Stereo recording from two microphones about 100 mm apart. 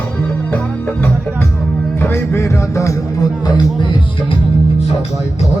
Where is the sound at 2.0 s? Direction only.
25° left (ahead or behind); by 3.8 s 45° left (ahead or behind).